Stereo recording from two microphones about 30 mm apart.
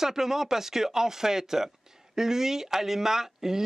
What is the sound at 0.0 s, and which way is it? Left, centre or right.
Speech, centre.